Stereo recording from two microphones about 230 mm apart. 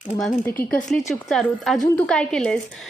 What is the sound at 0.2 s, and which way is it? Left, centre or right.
A woman's voice, centre.